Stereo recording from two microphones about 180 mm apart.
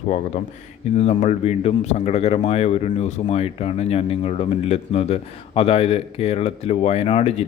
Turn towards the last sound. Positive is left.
turn(degrees=35)  # may be behind; listen again after turning